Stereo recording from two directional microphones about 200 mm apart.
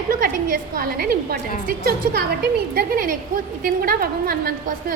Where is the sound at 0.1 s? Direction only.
45° right (ahead or behind).